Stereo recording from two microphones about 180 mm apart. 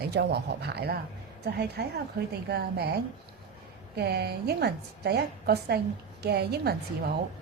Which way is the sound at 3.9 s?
65° right (ahead or behind).